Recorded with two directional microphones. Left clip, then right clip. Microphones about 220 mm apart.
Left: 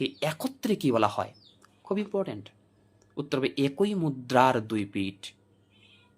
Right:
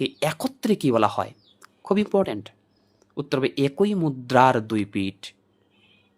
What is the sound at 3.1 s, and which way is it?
Speech, 20° right (ahead or behind).